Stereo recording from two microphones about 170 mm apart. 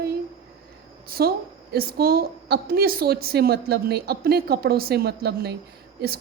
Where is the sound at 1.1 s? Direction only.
60° right (ahead or behind).